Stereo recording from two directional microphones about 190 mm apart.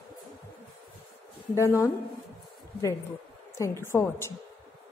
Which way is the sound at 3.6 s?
15° left (ahead or behind).